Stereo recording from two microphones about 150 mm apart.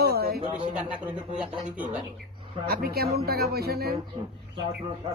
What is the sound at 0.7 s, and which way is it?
Speech, 10° right (ahead or behind).